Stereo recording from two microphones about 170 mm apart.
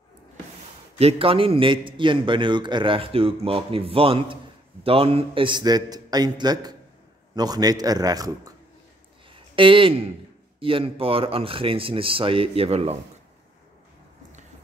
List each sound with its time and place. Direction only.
0.9 s a man's voice: 35° right (ahead or behind)
9.3 s a sound: 30° right (ahead or behind)
10.6 s a man's voice: 30° right (ahead or behind)